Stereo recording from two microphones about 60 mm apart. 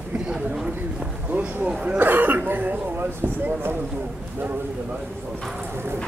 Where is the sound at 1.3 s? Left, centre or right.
Right.